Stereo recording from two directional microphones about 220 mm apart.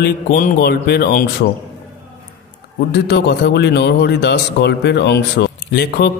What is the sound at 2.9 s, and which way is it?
Speech, 50° left (ahead or behind).